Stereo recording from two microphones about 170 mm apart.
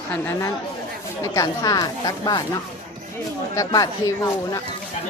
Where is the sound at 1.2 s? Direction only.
20° left (ahead or behind).